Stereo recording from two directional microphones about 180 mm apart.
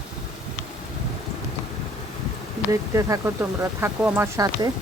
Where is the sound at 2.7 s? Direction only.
15° right (ahead or behind).